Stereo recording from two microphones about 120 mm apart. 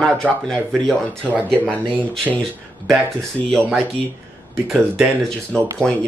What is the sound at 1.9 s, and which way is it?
Speech, 10° left (ahead or behind).